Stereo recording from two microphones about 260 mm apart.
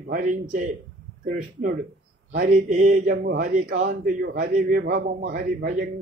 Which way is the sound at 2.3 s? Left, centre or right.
Right.